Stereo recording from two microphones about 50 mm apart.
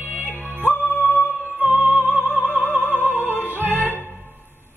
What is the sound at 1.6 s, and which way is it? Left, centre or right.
Music, right.